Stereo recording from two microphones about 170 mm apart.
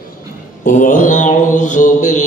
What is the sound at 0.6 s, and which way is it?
Mantra, 50° left (ahead or behind).